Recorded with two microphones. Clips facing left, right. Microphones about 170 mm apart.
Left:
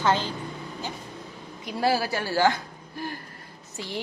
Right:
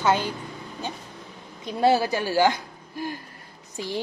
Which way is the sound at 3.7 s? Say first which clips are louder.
Right 4 dB; 15° right (ahead or behind).